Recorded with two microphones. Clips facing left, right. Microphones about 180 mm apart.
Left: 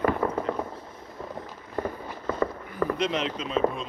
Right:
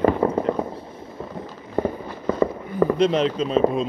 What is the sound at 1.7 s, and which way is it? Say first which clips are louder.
Fireworks: right 7 dB; 20° right (ahead or behind).